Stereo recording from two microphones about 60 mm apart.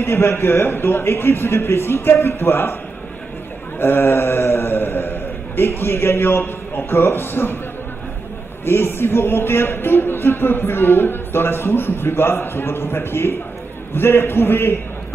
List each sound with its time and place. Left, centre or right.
0.0 s a man's voice: left
3.8 s a man's voice: left
8.6 s speech: left